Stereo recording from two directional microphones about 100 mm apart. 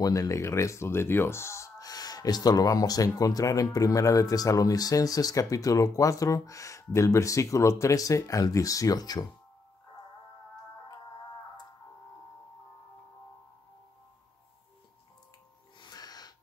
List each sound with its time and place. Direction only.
0.0 s speech: 35° left (ahead or behind)
15.8 s snort: 40° left (ahead or behind)